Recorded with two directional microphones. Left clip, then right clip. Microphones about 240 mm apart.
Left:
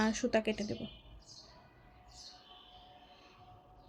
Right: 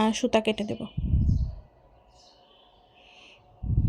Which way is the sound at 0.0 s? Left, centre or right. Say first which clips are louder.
Right 8 dB; right.